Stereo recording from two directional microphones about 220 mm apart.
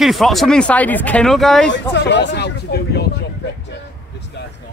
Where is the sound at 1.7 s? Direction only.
50° left (ahead or behind).